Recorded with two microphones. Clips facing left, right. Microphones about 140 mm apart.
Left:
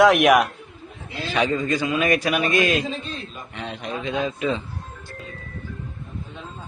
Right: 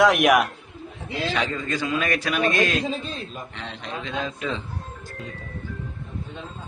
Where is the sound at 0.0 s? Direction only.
Centre (ahead or behind).